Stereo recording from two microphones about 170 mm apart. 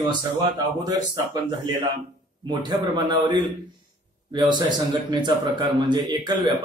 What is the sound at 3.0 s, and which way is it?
A man's voice, 25° right (ahead or behind).